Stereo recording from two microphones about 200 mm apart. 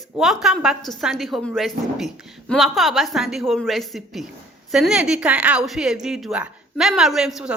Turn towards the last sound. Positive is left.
turn(degrees=0)  # may be behind; listen again after turning